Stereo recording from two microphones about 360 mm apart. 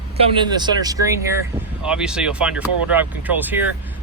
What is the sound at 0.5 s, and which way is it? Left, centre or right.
Speech, centre.